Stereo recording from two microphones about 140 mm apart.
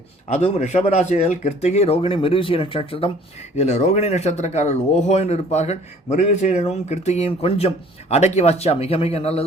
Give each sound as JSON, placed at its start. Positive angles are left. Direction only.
{"t": 0.3, "sound": "speech", "side_deg": 50}
{"t": 3.6, "sound": "speech", "side_deg": 55}